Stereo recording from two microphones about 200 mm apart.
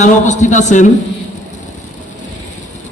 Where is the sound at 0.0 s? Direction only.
35° left (ahead or behind).